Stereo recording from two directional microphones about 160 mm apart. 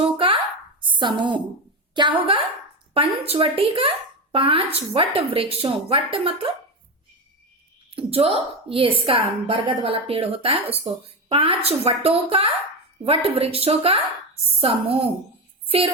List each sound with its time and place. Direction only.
0.8 s a woman's voice: 30° right (ahead or behind)
7.9 s speech: 35° right (ahead or behind)